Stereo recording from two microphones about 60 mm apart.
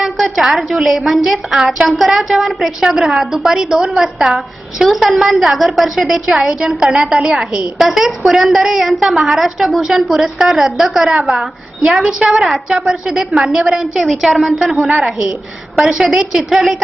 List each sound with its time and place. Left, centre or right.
0.0 s a woman's voice: centre
11.1 s a woman's voice: centre
12.5 s a woman's voice: centre